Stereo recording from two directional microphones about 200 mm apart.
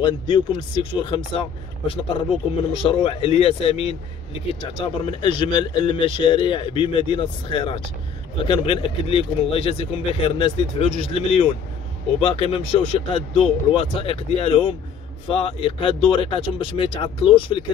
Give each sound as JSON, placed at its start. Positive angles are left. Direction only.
{"t": 0.0, "sound": "speech", "side_deg": 25}